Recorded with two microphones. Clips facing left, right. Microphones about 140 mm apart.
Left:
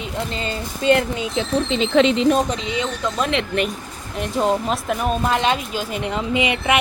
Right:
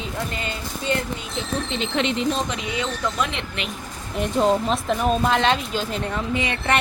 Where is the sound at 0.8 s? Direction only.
85° left.